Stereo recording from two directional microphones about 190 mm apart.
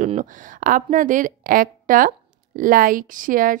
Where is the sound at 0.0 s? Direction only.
40° right (ahead or behind).